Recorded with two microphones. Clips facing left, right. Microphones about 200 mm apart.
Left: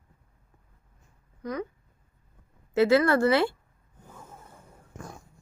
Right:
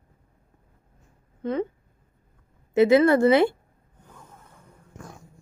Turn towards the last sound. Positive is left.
turn(degrees=-20)  # may be behind; listen again after turning